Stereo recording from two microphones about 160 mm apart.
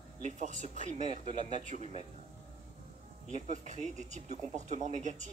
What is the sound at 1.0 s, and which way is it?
Speech, 40° left (ahead or behind).